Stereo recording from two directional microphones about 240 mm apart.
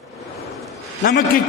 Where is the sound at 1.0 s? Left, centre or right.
Left.